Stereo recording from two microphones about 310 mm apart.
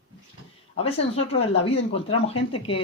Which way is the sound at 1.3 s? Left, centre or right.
Centre.